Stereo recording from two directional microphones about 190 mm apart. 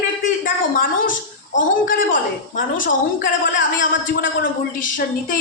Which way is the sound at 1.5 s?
45° left (ahead or behind).